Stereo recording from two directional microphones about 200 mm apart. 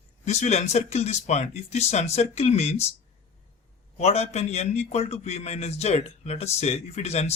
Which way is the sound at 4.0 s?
30° left (ahead or behind).